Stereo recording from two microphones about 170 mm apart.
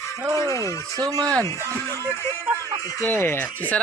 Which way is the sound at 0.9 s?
20° right (ahead or behind).